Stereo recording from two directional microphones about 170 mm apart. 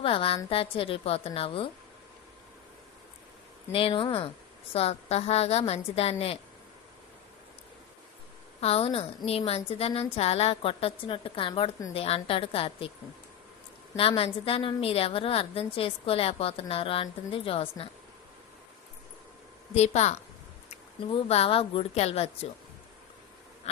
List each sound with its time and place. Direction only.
0.0 s a woman's voice: 35° left (ahead or behind)
3.7 s a woman's voice: 30° left (ahead or behind)
8.6 s a woman's voice: 35° left (ahead or behind)
13.9 s a woman's voice: 35° left (ahead or behind)
19.7 s a woman's voice: 40° left (ahead or behind)